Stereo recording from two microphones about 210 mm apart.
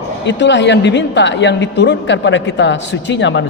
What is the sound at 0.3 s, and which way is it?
A woman's voice, 60° left (ahead or behind).